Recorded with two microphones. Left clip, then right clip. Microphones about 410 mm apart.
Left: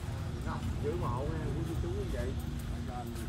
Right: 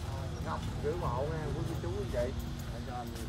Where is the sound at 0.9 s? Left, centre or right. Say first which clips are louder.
Right 1 dB; right.